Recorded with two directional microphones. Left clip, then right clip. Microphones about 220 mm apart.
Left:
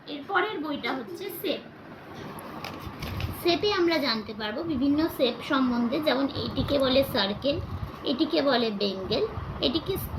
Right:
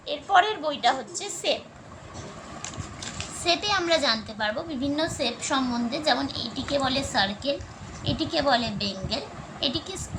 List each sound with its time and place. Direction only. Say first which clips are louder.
0.1 s a woman's voice: right 6 dB; 45° right (ahead or behind)
3.4 s a woman's voice: even; 40° right (ahead or behind)